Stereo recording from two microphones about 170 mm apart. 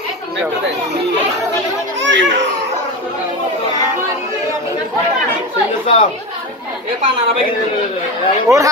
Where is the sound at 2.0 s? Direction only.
90° right.